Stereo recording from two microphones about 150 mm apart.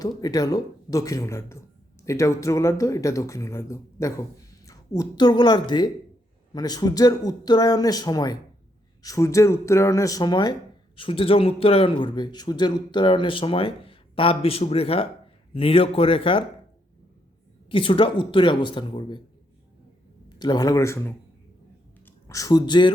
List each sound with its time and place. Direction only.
0.0 s speech: 25° left (ahead or behind)
17.7 s speech: 35° left (ahead or behind)
20.4 s speech: 25° left (ahead or behind)